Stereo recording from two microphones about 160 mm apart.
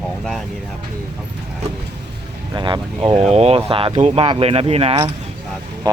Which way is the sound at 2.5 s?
30° right (ahead or behind).